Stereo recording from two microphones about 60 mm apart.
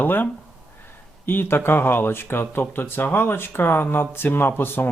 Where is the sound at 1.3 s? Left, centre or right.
Left.